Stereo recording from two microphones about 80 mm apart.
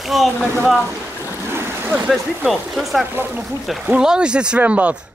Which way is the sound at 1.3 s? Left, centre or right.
Right.